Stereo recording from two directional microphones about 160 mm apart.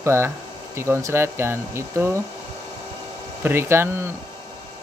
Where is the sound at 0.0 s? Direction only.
15° right (ahead or behind).